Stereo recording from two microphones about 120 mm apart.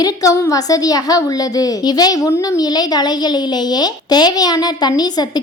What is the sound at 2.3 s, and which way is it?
Speech, 25° left (ahead or behind).